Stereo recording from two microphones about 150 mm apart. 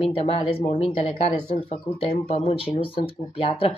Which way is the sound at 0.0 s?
40° left (ahead or behind).